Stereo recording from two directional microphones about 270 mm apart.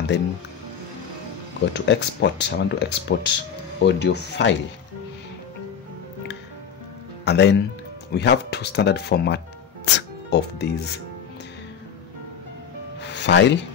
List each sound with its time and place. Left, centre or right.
0.1 s speech: left
1.7 s speech: left
7.2 s speech: left
13.0 s music: left